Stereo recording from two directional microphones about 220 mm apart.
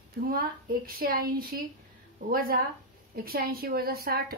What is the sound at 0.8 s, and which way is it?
A woman's voice, 40° right (ahead or behind).